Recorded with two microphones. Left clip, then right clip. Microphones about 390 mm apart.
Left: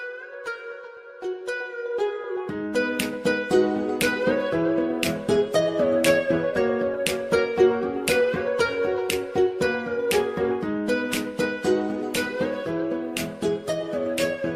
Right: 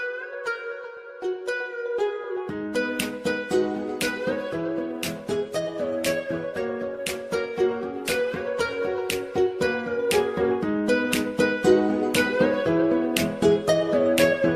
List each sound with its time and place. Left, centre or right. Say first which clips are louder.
2.7 s music: left 2 dB; centre
9.6 s music: even; centre; by 14.5 s right